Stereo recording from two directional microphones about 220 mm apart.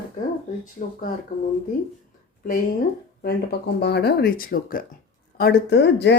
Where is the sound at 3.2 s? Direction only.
45° left (ahead or behind).